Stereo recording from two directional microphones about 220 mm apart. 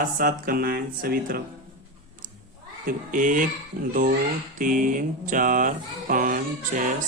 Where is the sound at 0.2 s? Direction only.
40° right (ahead or behind).